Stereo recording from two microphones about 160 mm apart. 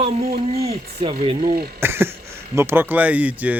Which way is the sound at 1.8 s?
15° right (ahead or behind).